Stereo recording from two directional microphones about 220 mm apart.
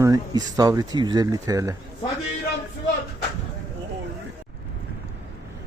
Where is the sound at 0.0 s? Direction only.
15° right (ahead or behind).